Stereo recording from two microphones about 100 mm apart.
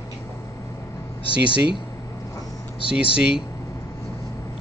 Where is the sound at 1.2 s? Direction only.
60° left (ahead or behind).